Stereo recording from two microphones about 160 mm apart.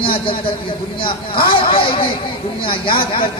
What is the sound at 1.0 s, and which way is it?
Speech, 30° left (ahead or behind).